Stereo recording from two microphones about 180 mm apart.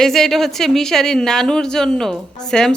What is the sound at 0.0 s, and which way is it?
A woman's voice, centre (ahead or behind).